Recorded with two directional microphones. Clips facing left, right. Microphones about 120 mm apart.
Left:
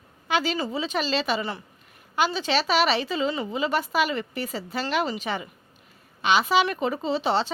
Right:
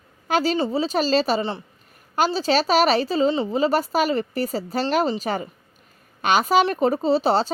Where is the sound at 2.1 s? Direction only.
40° right (ahead or behind).